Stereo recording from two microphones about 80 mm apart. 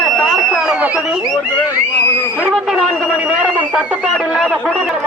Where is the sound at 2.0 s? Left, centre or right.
Left.